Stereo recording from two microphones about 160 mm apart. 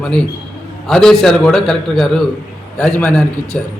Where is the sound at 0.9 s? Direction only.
5° left (ahead or behind).